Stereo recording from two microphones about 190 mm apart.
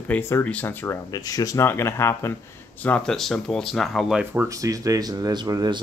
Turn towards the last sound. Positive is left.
turn(degrees=-20)  # may be behind; listen again after turning